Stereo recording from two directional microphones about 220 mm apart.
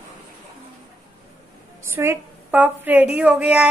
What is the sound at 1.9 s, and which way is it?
A woman's voice, 10° right (ahead or behind).